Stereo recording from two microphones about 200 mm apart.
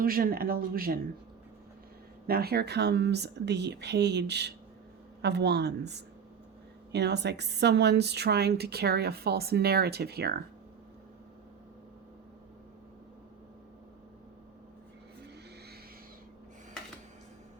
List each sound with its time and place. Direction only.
0.0 s a woman's voice: 45° right (ahead or behind)
2.2 s a woman's voice: 50° right (ahead or behind)